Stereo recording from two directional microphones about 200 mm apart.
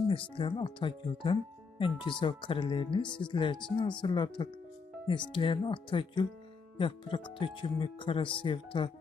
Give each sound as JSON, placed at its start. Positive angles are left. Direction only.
{"t": 0.1, "sound": "speech", "side_deg": 25}